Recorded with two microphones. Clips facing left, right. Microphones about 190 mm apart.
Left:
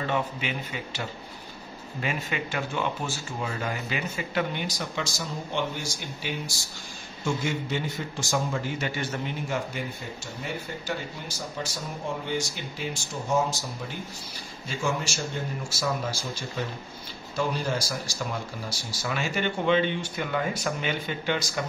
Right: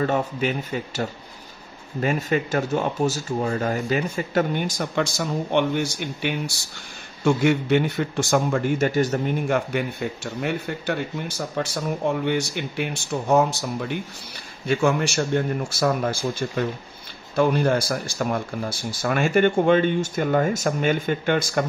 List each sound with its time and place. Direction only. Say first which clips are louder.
0.0 s a man's voice: right 6 dB; 45° right (ahead or behind)